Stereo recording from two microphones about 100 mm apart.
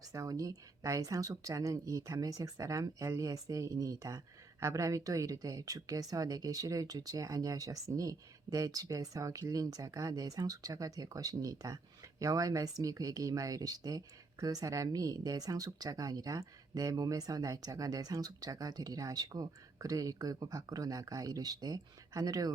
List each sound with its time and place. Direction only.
0.1 s speech: 35° right (ahead or behind)